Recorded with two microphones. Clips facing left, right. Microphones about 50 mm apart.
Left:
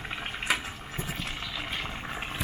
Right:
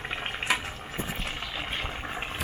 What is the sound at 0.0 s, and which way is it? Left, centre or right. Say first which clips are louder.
Boiling: right 2 dB; centre.